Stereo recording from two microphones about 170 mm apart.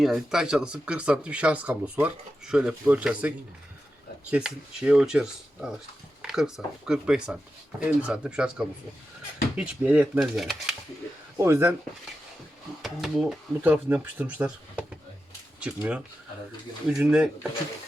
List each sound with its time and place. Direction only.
0.0 s speech: 5° right (ahead or behind)
11.3 s speech: 15° right (ahead or behind)
12.8 s speech: centre (ahead or behind)